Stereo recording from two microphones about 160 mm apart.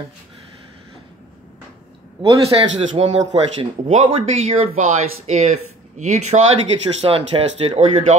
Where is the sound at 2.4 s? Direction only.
40° right (ahead or behind).